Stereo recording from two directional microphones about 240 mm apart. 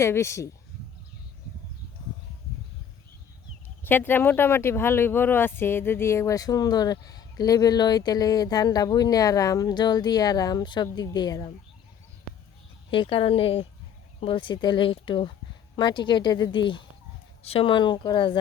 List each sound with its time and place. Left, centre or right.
0.0 s speech: centre
3.8 s speech: centre
12.9 s speech: left